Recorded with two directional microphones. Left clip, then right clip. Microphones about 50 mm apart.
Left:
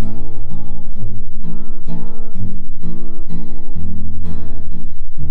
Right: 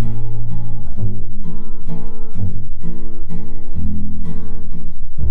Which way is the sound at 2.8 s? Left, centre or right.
Right.